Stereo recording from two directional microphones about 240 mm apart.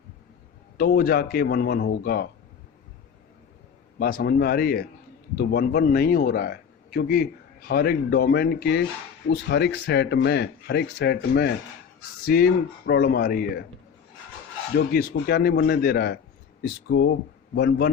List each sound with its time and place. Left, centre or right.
0.8 s a man's voice: left
3.9 s a man's voice: left
14.8 s a man's voice: left